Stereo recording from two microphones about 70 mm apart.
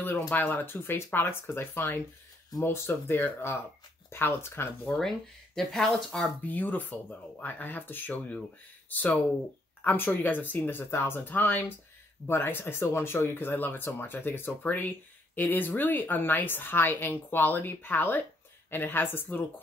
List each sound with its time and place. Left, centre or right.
0.3 s speech: left
4.9 s speech: centre
6.4 s a woman's voice: left
8.8 s a sound: left
9.8 s a woman's voice: left